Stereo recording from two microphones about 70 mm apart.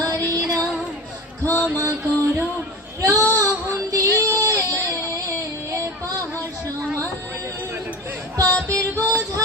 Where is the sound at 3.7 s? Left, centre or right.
Right.